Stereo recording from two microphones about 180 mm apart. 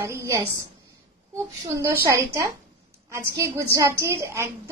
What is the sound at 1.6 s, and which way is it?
Speech, 20° right (ahead or behind).